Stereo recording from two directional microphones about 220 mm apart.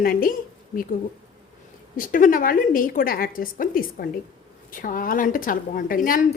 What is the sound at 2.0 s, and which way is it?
A woman's voice, 40° left (ahead or behind).